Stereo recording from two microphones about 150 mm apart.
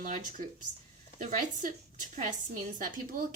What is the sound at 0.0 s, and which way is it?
A woman's voice, 60° right (ahead or behind).